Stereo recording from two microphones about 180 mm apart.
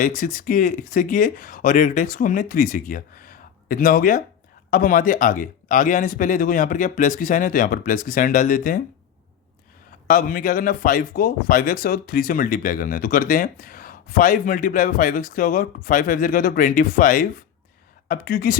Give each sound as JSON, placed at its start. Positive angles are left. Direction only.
{"t": 0.0, "sound": "speech", "side_deg": 50}
{"t": 10.1, "sound": "speech", "side_deg": 50}